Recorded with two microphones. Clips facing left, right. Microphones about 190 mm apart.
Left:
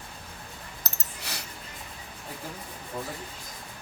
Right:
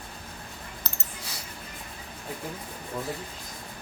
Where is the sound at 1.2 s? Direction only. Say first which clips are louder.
Left 5 dB; 70° left (ahead or behind).